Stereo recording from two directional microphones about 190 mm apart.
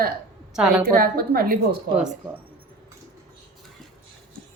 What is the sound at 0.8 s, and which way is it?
Speech, 50° right (ahead or behind).